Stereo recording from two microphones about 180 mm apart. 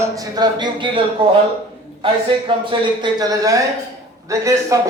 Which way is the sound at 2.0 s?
30° right (ahead or behind).